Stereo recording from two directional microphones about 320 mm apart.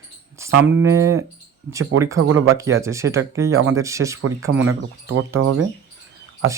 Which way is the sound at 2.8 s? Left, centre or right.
Centre.